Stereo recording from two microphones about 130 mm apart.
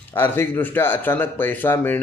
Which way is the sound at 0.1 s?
15° left (ahead or behind).